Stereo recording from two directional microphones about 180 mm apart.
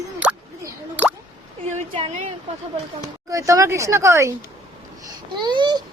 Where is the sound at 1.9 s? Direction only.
30° right (ahead or behind).